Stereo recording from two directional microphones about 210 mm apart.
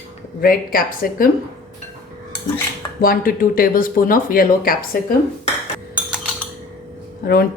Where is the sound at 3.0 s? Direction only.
45° left (ahead or behind).